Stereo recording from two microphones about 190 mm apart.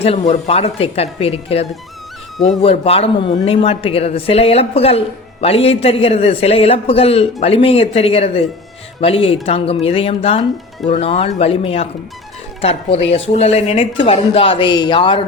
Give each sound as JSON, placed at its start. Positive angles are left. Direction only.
{"t": 0.0, "sound": "speech", "side_deg": 35}